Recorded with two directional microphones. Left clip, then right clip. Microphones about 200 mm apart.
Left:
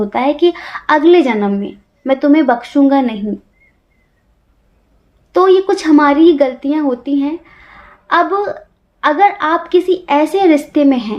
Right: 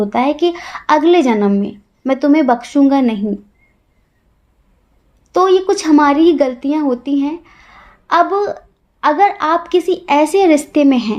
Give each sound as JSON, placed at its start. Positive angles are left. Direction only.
{"t": 0.0, "sound": "a woman's voice", "side_deg": -45}
{"t": 5.3, "sound": "a woman's voice", "side_deg": -40}